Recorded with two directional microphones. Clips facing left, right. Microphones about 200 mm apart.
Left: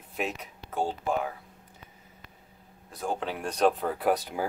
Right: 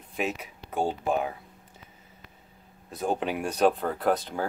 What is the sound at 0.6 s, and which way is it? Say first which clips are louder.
Speech: right 2 dB; 15° right (ahead or behind).